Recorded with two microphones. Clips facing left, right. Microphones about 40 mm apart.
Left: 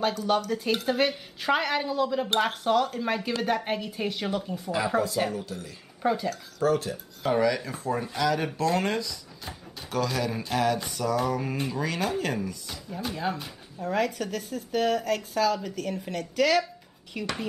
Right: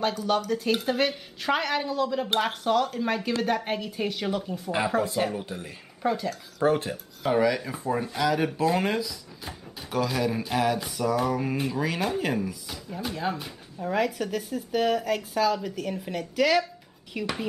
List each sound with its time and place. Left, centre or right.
0.0 s a woman's voice: centre
5.4 s speech: right
6.0 s a woman's voice: centre
6.6 s speech: right
7.2 s a woman's voice: centre